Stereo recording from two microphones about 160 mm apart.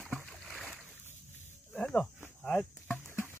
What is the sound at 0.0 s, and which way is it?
Boat, 5° left (ahead or behind).